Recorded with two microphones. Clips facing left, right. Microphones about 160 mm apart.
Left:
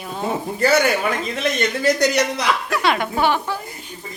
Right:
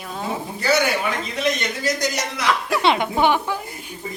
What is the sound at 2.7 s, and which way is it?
Speech, 25° right (ahead or behind).